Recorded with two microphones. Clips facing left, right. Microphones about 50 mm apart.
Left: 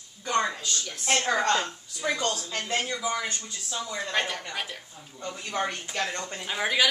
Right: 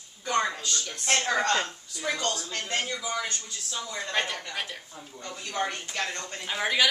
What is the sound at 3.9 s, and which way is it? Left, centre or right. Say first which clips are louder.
Speech: left 1 dB; centre.